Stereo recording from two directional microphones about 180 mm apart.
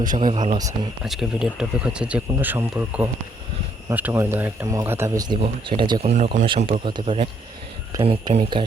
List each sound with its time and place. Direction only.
0.2 s speech: 25° right (ahead or behind)
1.0 s speech: centre (ahead or behind); by 6.1 s 25° right (ahead or behind)
6.1 s speech: 40° right (ahead or behind)